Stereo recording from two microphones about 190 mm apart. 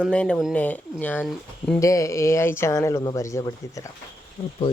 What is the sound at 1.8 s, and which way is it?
Speech, 15° left (ahead or behind).